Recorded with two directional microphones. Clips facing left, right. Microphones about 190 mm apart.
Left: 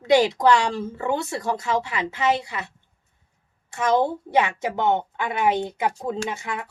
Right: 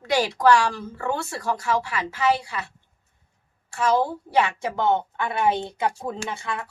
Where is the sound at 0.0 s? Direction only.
20° left (ahead or behind).